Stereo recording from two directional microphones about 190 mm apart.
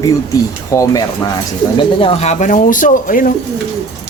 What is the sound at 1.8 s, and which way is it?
Speech, 30° left (ahead or behind).